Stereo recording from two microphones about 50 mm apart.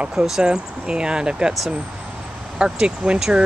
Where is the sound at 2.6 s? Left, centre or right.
Centre.